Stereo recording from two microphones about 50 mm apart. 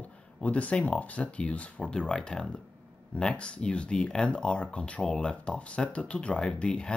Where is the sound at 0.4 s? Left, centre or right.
Left.